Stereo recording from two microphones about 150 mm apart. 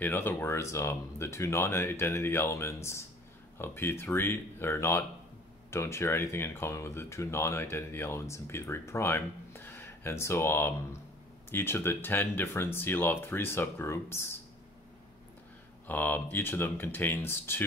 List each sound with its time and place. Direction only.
0.0 s speech: 15° left (ahead or behind)
15.9 s speech: 10° left (ahead or behind)